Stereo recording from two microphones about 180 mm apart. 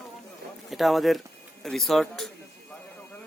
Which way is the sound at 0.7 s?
Centre (ahead or behind).